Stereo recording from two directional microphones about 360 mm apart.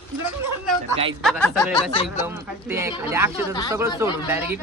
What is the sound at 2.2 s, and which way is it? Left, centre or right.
Speech, centre.